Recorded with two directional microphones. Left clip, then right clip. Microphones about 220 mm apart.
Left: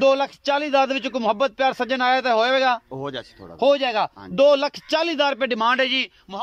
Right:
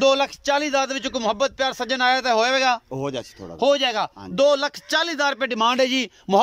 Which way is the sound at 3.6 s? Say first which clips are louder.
Left 1 dB; centre (ahead or behind).